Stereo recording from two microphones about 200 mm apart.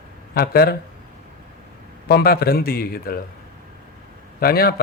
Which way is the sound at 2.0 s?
50° left (ahead or behind).